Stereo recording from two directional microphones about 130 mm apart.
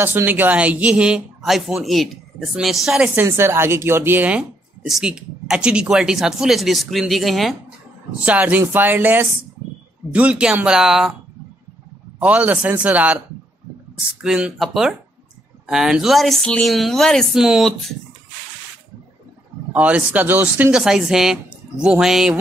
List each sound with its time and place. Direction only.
0.0 s speech: 15° right (ahead or behind)
3.2 s speech: 20° right (ahead or behind); by 7.5 s centre (ahead or behind)
8.2 s speech: 10° right (ahead or behind)
12.2 s speech: 10° right (ahead or behind)
14.2 s speech: 5° right (ahead or behind)
19.7 s speech: 10° right (ahead or behind)